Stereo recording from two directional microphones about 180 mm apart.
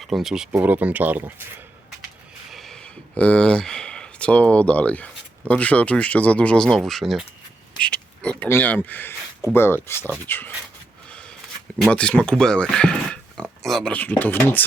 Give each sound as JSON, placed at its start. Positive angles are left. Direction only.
{"t": 0.0, "sound": "speech", "side_deg": 0}
{"t": 2.5, "sound": "speech", "side_deg": 0}
{"t": 11.8, "sound": "speech", "side_deg": 5}